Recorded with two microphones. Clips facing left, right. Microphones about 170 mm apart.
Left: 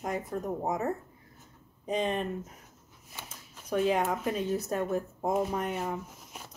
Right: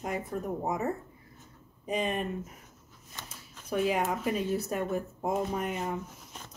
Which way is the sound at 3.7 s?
5° right (ahead or behind).